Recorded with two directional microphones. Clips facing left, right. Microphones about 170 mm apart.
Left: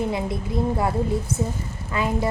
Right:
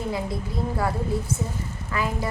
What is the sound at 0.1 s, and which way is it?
A woman's voice, 20° left (ahead or behind).